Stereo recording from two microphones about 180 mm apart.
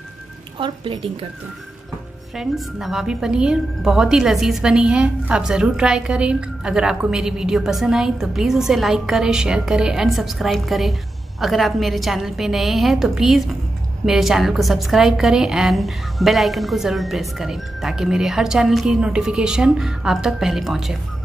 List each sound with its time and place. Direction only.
0.6 s a woman's voice: 30° right (ahead or behind)
2.3 s a woman's voice: centre (ahead or behind)